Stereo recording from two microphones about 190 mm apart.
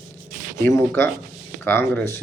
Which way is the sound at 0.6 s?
15° left (ahead or behind).